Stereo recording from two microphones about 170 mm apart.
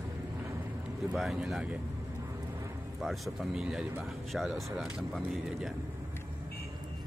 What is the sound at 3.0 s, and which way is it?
Speech, centre (ahead or behind).